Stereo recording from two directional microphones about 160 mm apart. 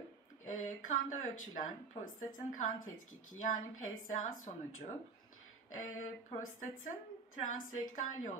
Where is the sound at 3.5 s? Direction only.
55° left (ahead or behind).